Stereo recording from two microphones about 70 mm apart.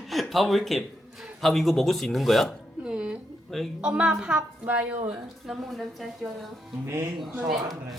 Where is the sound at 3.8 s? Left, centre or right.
Centre.